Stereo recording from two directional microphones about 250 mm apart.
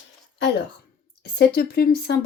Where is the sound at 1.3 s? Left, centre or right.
Left.